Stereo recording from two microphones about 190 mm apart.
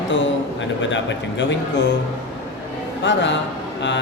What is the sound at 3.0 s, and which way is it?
Speech, 70° left (ahead or behind).